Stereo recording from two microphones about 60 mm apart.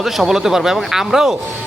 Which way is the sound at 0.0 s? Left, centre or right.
Centre.